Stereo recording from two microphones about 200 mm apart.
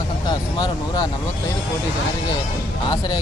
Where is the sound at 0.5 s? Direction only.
20° left (ahead or behind).